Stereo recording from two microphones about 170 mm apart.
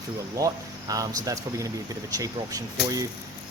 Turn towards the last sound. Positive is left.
turn(degrees=-20)  # may be behind; listen again after turning